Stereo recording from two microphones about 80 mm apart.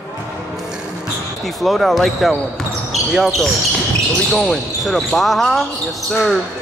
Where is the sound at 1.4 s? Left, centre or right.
Centre.